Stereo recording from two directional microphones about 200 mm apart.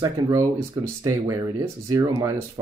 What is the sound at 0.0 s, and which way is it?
Speech, 15° right (ahead or behind).